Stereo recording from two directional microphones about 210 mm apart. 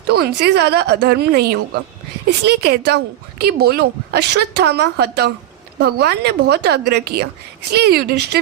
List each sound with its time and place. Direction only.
0.1 s a woman's voice: 50° right (ahead or behind)